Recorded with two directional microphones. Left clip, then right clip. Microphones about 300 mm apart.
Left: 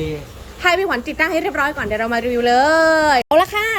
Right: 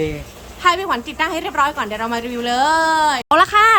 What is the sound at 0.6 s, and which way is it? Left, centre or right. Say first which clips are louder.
A woman's voice: even; centre.